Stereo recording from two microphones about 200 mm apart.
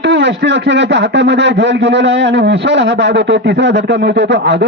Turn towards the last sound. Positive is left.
turn(degrees=-60)  # may be behind; listen again after turning